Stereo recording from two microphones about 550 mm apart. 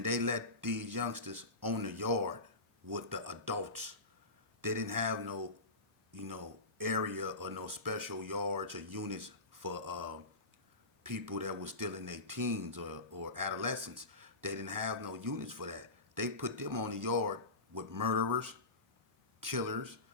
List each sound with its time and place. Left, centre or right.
0.0 s speech: right